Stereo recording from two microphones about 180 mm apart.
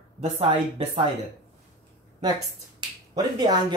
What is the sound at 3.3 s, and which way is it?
Speech, 25° right (ahead or behind).